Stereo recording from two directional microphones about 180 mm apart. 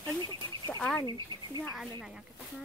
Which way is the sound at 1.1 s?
25° right (ahead or behind).